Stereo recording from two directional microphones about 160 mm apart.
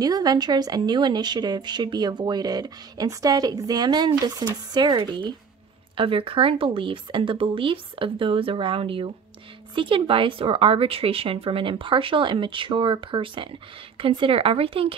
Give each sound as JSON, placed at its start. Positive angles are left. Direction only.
{"t": 0.0, "sound": "a woman's voice", "side_deg": -25}